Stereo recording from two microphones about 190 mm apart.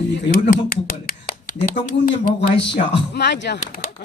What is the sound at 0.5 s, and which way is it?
Speech, 50° left (ahead or behind).